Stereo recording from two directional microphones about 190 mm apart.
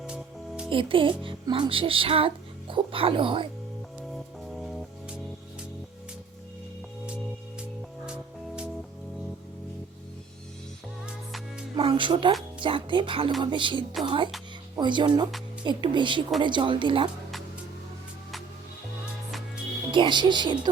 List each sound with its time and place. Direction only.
0.1 s music: 5° right (ahead or behind)
0.7 s speech: 25° right (ahead or behind)
4.5 s music: centre (ahead or behind)
11.0 s music: centre (ahead or behind)
11.8 s music: 25° right (ahead or behind)
12.5 s speech: 25° right (ahead or behind)
19.9 s speech: 25° right (ahead or behind)